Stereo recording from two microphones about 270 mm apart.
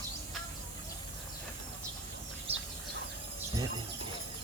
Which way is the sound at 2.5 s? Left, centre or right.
Right.